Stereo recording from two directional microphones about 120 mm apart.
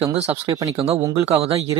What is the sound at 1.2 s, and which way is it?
Speech, 55° right (ahead or behind).